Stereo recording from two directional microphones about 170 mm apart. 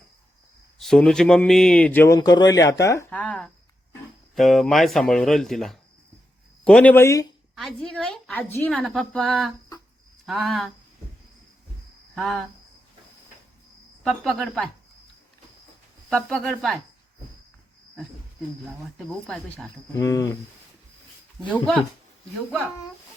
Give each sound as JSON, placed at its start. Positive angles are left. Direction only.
{"t": 0.8, "sound": "speech", "side_deg": 5}
{"t": 3.1, "sound": "speech", "side_deg": 5}
{"t": 7.5, "sound": "speech", "side_deg": 0}
{"t": 12.1, "sound": "cricket", "side_deg": 0}
{"t": 14.0, "sound": "speech", "side_deg": 0}
{"t": 16.0, "sound": "speech", "side_deg": 5}
{"t": 18.9, "sound": "speech", "side_deg": 0}
{"t": 20.0, "sound": "cricket", "side_deg": 20}
{"t": 21.5, "sound": "speech", "side_deg": 5}